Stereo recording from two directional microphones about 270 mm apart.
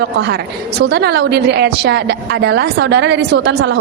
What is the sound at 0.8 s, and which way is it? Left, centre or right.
A woman's voice, right.